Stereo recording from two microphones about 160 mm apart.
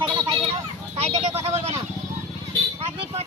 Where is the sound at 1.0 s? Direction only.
40° right (ahead or behind).